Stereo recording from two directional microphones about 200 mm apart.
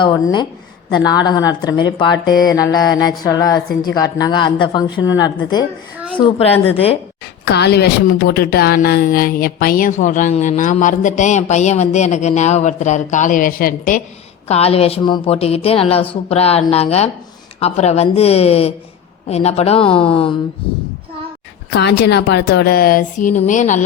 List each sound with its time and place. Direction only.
0.0 s a woman's voice: 20° left (ahead or behind)
7.4 s a woman's voice: 55° left (ahead or behind)
14.4 s a woman's voice: 30° left (ahead or behind)
21.7 s a woman's voice: 60° left (ahead or behind); by 23.8 s 40° left (ahead or behind)